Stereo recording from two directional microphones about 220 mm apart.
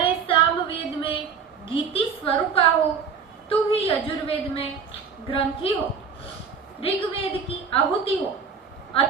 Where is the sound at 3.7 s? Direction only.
25° left (ahead or behind).